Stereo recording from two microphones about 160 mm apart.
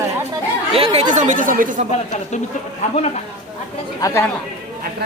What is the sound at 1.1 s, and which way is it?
Speech, 50° right (ahead or behind).